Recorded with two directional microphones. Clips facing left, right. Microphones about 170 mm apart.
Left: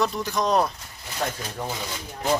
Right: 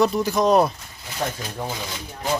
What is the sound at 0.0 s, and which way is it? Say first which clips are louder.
Speech: right 6 dB; 5° right (ahead or behind).